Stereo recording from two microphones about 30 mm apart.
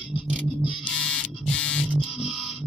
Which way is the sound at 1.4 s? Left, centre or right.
Left.